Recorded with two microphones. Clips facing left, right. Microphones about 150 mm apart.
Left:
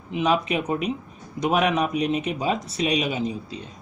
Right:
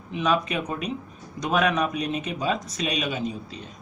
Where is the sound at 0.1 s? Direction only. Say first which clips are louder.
Left 2 dB; 25° left (ahead or behind).